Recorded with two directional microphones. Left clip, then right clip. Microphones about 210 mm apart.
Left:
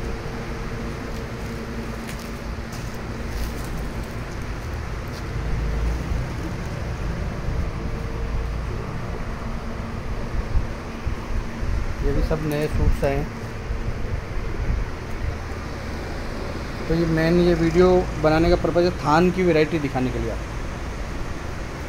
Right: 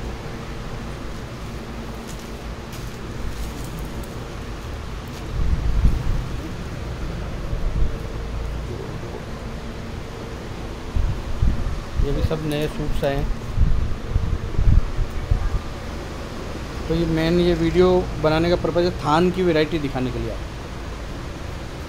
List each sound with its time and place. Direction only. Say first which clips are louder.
12.3 s speech: even; centre (ahead or behind)
17.2 s speech: left 1 dB; centre (ahead or behind)